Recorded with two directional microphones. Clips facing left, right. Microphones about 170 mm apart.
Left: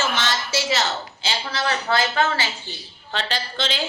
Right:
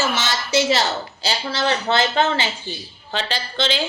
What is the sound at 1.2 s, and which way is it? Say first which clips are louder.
Speech: right 4 dB; 30° right (ahead or behind).